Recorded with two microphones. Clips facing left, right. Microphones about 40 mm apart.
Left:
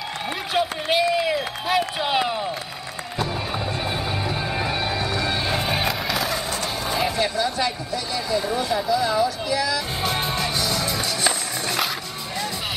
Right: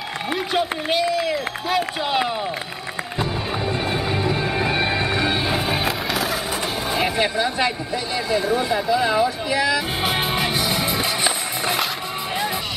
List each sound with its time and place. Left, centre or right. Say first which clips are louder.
0.5 s speech: left 1 dB; centre
1.1 s speech: even; centre
1.7 s speech: even; centre
3.8 s music: right 3 dB; centre
4.7 s music: right 4 dB; right
5.4 s music: right 1 dB; centre
6.9 s vehicle: right 1 dB; centre
7.2 s speech: right 2 dB; right
8.5 s music: right 2 dB; centre